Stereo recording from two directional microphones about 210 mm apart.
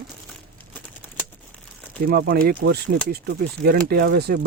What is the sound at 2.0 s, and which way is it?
Speech, 45° right (ahead or behind).